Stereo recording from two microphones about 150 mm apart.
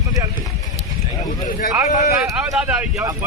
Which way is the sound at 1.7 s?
20° right (ahead or behind).